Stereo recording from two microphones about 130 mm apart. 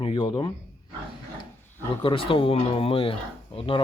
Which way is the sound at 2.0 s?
45° left (ahead or behind).